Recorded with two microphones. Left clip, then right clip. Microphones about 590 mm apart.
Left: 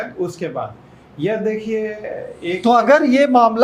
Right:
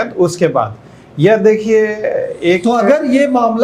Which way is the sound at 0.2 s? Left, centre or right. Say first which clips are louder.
Right 13 dB; right.